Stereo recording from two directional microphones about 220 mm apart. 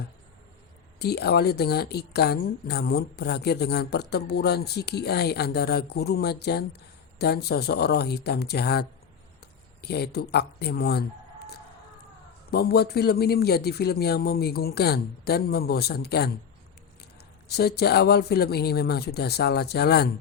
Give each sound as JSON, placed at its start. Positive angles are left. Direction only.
{"t": 0.9, "sound": "a woman's voice", "side_deg": 45}
{"t": 12.5, "sound": "a woman's voice", "side_deg": 45}
{"t": 17.5, "sound": "a woman's voice", "side_deg": 45}